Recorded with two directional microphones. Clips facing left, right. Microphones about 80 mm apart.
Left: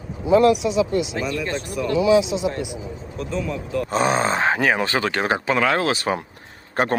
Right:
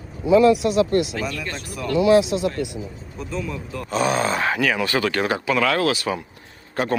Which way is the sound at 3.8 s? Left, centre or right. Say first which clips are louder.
Even; left.